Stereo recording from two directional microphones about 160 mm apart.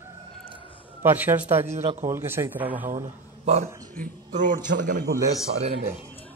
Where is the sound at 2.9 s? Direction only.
45° right (ahead or behind).